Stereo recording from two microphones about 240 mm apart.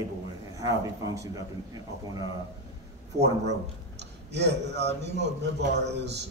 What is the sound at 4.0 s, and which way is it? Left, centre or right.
A man's voice, right.